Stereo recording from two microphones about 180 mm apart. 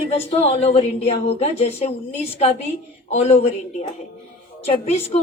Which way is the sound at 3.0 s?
35° left (ahead or behind).